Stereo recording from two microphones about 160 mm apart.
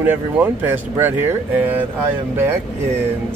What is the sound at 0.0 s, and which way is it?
Speech, 10° right (ahead or behind).